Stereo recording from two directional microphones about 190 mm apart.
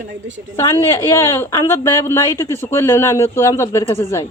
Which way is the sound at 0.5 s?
15° left (ahead or behind).